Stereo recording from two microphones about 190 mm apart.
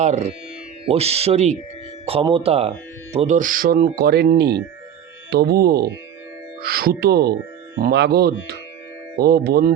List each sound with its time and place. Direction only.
0.0 s speech: 35° right (ahead or behind); by 9.7 s 55° right (ahead or behind)